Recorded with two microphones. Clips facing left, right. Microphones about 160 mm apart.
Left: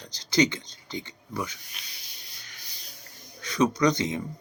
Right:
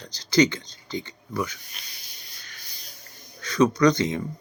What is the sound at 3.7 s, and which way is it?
Speech, 20° left (ahead or behind).